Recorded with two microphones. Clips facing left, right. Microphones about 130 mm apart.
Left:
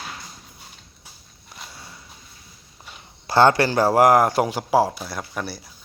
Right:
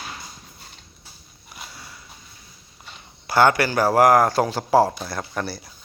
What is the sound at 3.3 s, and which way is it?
A man's voice, 25° left (ahead or behind).